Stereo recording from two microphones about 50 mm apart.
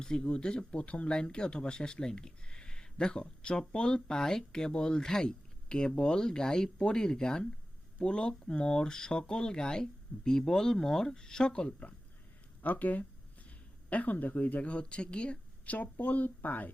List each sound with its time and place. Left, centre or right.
0.0 s speech: centre
12.6 s speech: left